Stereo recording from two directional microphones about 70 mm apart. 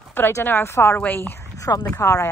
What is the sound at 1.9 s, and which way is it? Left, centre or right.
Speech, left.